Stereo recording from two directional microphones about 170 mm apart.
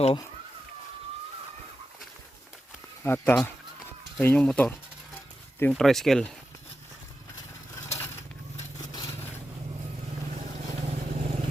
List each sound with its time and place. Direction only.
3.0 s speech: 10° left (ahead or behind)
7.9 s crushing: 15° left (ahead or behind)
10.8 s vehicle: 40° right (ahead or behind)